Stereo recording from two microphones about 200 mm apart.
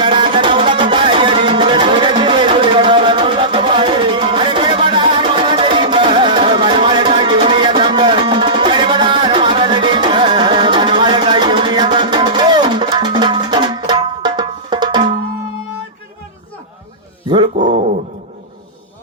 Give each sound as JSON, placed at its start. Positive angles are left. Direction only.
{"t": 0.0, "sound": "music", "side_deg": -25}
{"t": 17.2, "sound": "dog", "side_deg": -25}